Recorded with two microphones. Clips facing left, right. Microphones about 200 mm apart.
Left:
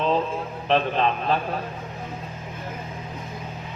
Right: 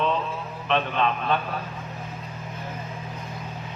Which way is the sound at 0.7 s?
35° left (ahead or behind).